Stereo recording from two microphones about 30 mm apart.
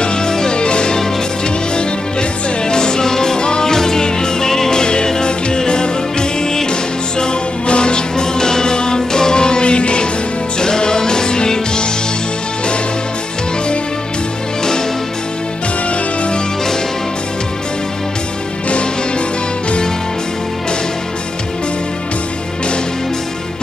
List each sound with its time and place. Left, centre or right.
0.0 s music: left
4.7 s music: left
10.6 s music: left
15.9 s music: left
18.7 s music: left